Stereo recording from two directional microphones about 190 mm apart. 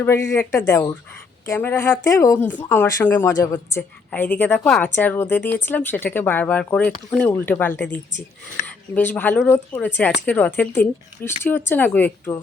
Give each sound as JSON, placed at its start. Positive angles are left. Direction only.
{"t": 0.0, "sound": "speech", "side_deg": 15}